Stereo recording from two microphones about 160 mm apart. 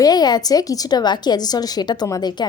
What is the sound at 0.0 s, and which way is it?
A woman's voice, 25° left (ahead or behind).